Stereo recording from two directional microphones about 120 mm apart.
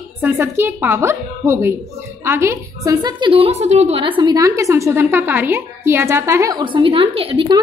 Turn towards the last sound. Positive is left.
turn(degrees=-45)  # may be behind; listen again after turning